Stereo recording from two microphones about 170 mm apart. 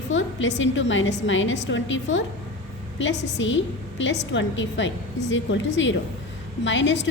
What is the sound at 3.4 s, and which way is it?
A woman's voice, 90° left.